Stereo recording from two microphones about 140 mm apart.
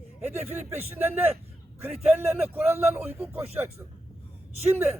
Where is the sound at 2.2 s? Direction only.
15° right (ahead or behind).